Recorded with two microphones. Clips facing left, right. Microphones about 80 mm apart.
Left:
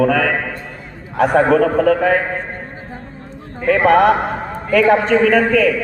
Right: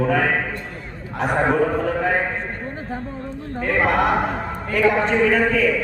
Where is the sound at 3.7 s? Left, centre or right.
Left.